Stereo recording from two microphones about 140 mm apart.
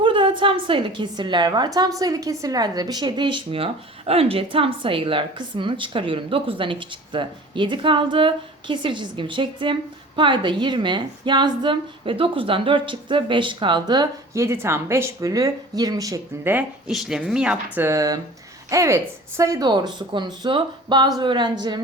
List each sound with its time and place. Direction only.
0.0 s a woman's voice: 35° right (ahead or behind)
14.4 s speech: 20° right (ahead or behind)
16.9 s speech: 5° right (ahead or behind)
17.8 s a woman's voice: 25° right (ahead or behind)